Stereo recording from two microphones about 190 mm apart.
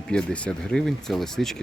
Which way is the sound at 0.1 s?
5° left (ahead or behind).